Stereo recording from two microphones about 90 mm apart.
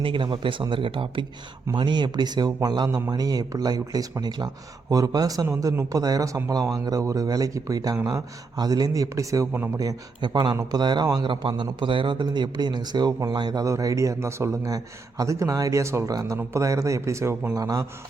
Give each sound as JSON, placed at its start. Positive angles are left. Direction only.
{"t": 0.0, "sound": "speech", "side_deg": -65}
{"t": 10.2, "sound": "a man's voice", "side_deg": -55}
{"t": 11.2, "sound": "speech", "side_deg": -65}